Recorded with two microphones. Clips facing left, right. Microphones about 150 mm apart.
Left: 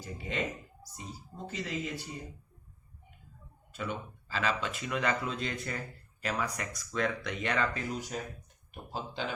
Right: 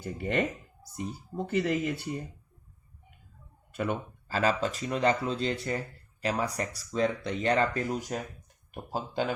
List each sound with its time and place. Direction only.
0.0 s speech: 55° right (ahead or behind)
1.5 s speech: 60° right (ahead or behind)
3.7 s speech: 55° right (ahead or behind)